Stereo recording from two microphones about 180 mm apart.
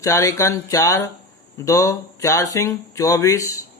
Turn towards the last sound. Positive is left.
turn(degrees=20)  # may be behind; listen again after turning